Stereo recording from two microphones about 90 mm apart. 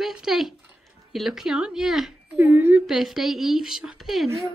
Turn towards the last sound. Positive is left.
turn(degrees=-5)  # may be behind; listen again after turning